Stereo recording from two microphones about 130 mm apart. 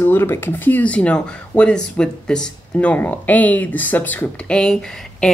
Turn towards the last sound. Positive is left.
turn(degrees=5)  # may be behind; listen again after turning